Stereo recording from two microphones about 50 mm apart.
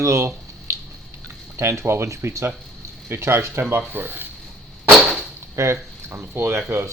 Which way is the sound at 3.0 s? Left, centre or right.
Right.